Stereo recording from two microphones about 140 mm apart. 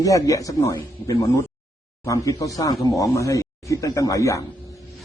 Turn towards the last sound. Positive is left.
turn(degrees=25)  # may be behind; listen again after turning